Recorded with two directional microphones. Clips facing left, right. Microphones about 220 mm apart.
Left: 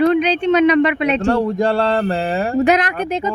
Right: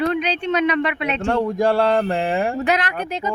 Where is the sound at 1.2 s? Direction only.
5° right (ahead or behind).